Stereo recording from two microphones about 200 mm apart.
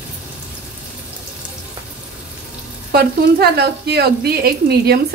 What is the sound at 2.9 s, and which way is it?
Speech, 50° right (ahead or behind).